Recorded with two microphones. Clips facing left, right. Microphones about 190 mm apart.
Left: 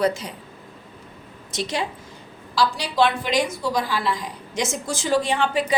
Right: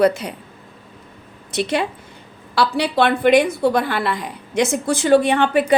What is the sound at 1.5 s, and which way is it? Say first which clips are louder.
A woman's voice: right 6 dB; 60° right (ahead or behind).